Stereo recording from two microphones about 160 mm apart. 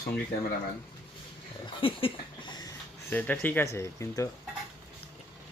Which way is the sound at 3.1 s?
10° left (ahead or behind).